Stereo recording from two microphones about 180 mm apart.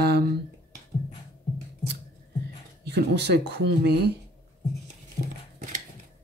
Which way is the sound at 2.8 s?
70° right (ahead or behind).